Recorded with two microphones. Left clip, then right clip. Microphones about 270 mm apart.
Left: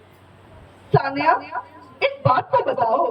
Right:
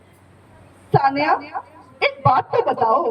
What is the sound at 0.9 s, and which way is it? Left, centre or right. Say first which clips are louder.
Speech: right 1 dB; right.